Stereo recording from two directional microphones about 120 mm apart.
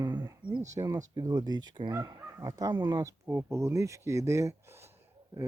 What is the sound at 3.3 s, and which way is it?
Speech, 20° right (ahead or behind).